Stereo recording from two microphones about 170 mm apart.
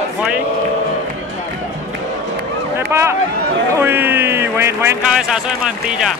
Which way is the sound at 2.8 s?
15° right (ahead or behind).